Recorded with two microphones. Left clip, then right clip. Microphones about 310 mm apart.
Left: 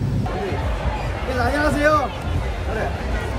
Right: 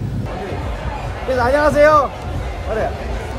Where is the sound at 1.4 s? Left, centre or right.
Centre.